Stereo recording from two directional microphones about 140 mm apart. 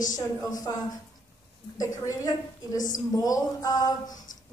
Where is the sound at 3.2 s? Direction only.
25° left (ahead or behind).